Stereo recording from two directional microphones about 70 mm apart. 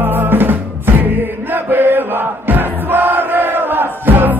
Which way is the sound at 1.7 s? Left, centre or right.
Right.